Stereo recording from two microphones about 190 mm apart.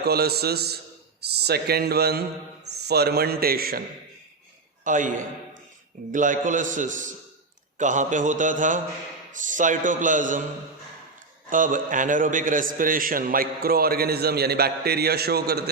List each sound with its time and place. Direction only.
0.0 s a man's voice: 55° right (ahead or behind)
11.4 s a man's voice: 45° right (ahead or behind)